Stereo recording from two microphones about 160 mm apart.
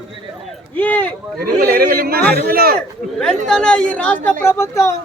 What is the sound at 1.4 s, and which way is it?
A man's voice, 65° right (ahead or behind).